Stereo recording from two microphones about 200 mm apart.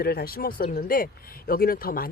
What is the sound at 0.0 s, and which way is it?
Speech, 50° left (ahead or behind).